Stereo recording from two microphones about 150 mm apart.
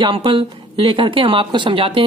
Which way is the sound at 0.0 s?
35° right (ahead or behind).